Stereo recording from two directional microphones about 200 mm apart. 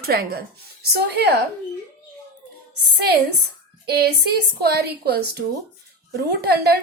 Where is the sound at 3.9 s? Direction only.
55° right (ahead or behind).